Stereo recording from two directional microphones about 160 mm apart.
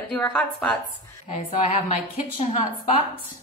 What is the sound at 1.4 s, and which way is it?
A woman's voice, 35° left (ahead or behind).